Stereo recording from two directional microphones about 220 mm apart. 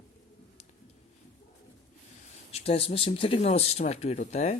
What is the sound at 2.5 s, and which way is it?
Speech, 25° left (ahead or behind).